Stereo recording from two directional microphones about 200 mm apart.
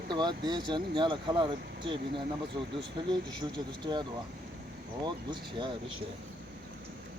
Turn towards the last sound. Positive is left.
turn(degrees=-25)  # may be behind; listen again after turning